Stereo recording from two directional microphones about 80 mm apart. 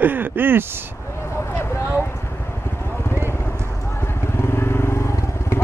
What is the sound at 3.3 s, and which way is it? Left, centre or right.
Clip-clop, left.